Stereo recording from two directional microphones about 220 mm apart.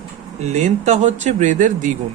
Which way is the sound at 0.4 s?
30° right (ahead or behind).